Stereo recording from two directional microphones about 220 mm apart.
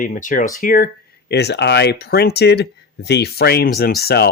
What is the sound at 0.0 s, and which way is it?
Speech, 35° left (ahead or behind).